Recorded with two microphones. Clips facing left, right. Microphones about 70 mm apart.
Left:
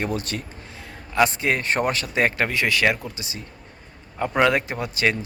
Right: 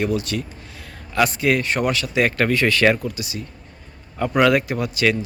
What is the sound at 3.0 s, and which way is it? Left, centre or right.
A man's voice, left.